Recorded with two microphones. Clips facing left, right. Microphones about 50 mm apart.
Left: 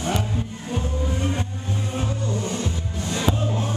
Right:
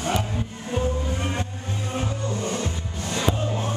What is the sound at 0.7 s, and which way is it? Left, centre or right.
Music, centre.